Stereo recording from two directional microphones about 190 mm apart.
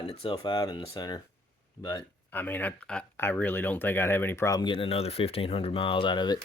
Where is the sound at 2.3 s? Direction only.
10° left (ahead or behind).